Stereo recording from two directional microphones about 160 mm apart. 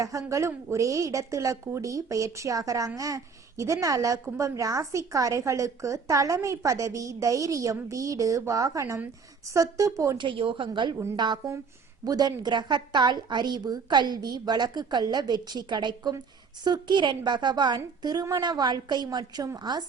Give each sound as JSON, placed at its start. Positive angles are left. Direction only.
{"t": 0.0, "sound": "a woman's voice", "side_deg": -20}
{"t": 10.2, "sound": "a woman's voice", "side_deg": -30}